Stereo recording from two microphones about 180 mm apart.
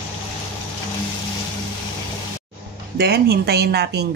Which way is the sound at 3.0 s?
65° right (ahead or behind).